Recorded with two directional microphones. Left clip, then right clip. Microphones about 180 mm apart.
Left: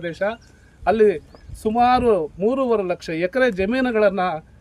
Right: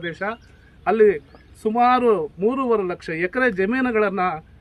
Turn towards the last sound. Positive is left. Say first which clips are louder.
# left 2 dB
turn(degrees=15)  # may be behind; listen again after turning